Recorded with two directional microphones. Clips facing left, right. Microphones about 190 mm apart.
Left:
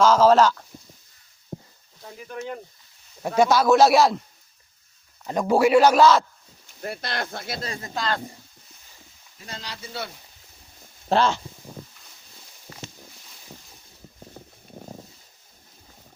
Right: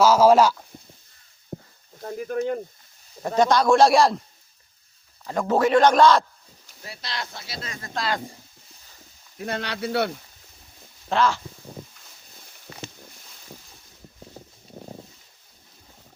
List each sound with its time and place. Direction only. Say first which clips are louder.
0.0 s speech: right 1 dB; 10° right (ahead or behind)
2.0 s a sound: right 9 dB; 50° right (ahead or behind)
3.2 s a man's voice: even; 10° left (ahead or behind)
5.2 s a man's voice: left 2 dB; 20° left (ahead or behind)
6.8 s speech: left 5 dB; 55° left (ahead or behind)
7.9 s speech: right 1 dB; 5° right (ahead or behind)
9.4 s speech: right 10 dB; 65° right (ahead or behind)
11.1 s speech: left 1 dB; 30° left (ahead or behind)